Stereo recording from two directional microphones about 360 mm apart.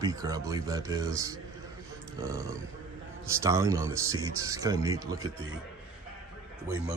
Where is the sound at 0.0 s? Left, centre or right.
Centre.